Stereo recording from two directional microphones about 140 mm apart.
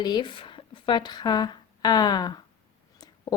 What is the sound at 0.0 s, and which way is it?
A woman's voice, 35° left (ahead or behind).